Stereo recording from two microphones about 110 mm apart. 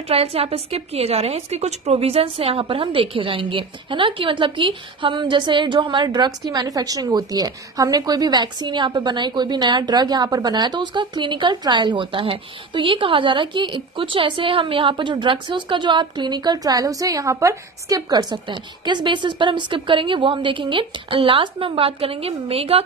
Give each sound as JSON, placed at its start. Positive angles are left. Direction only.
{"t": 0.1, "sound": "a woman's voice", "side_deg": -65}